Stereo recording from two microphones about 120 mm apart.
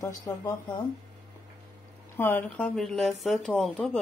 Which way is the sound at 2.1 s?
15° left (ahead or behind).